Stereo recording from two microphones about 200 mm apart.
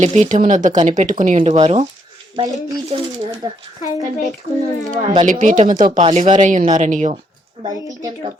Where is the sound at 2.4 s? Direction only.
20° right (ahead or behind).